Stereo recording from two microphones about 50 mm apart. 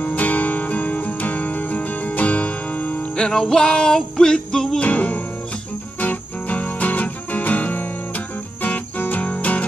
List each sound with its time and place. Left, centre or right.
0.0 s music: left
3.2 s music: centre
4.8 s music: left